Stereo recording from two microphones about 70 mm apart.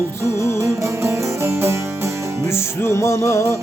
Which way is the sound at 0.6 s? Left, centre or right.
Right.